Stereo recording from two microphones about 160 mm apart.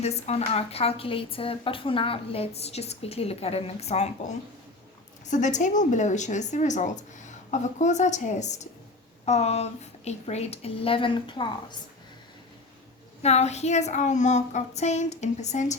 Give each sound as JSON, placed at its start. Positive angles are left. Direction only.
{"t": 0.0, "sound": "a woman's voice", "side_deg": 40}
{"t": 13.2, "sound": "a woman's voice", "side_deg": 45}